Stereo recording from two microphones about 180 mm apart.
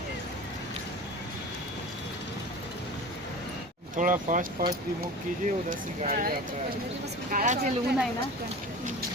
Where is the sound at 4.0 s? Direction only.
45° right (ahead or behind).